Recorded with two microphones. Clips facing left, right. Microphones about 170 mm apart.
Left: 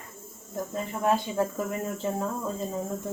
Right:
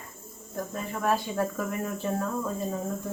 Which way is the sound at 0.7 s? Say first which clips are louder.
Left 2 dB; 20° left (ahead or behind).